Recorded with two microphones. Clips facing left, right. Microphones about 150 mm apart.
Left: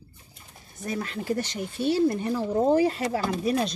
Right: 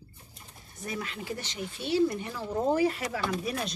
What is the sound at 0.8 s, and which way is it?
Speech, 40° left (ahead or behind).